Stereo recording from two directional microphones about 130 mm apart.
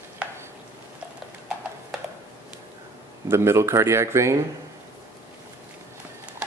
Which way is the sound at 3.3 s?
20° right (ahead or behind).